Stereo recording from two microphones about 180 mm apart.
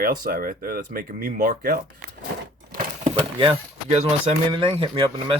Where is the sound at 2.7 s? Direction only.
40° right (ahead or behind).